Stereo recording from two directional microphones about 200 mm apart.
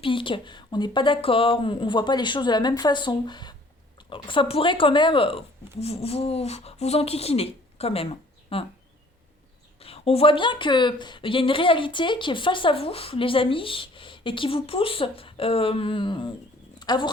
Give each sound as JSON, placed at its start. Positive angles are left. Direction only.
{"t": 0.0, "sound": "speech", "side_deg": 25}
{"t": 9.8, "sound": "speech", "side_deg": 30}